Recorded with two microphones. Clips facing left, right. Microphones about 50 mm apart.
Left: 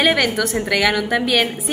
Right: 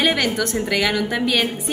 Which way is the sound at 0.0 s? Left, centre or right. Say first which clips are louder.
Left 2 dB; centre.